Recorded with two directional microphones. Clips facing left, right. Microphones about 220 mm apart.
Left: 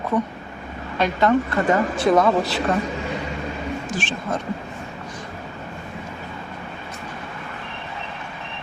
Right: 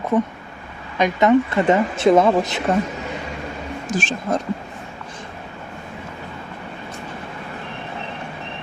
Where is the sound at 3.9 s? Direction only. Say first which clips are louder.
Right 9 dB; 45° right (ahead or behind).